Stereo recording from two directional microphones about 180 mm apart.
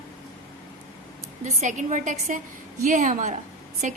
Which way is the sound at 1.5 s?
45° right (ahead or behind).